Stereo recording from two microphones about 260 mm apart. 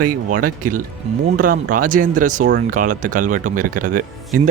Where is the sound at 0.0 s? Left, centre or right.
Right.